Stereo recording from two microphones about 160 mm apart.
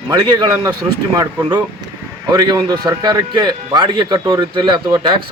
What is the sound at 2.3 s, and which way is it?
A man's voice, 25° right (ahead or behind).